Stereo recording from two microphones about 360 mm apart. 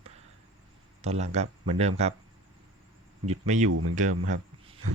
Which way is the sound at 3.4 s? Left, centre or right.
Centre.